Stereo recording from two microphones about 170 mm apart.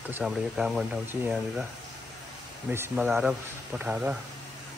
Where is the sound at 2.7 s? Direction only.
15° right (ahead or behind).